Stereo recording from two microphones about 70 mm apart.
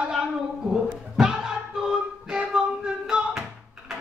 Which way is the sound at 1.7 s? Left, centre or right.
Centre.